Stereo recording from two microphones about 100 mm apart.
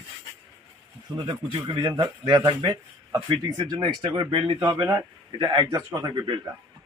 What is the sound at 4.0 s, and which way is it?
Speech, 55° right (ahead or behind).